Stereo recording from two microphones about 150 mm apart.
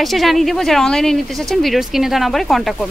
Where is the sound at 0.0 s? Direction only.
Centre (ahead or behind).